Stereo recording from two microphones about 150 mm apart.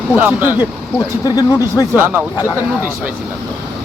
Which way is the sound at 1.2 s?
25° left (ahead or behind).